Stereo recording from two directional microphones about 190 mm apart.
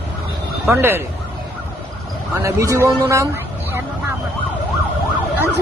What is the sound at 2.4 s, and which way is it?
Speech, 15° right (ahead or behind).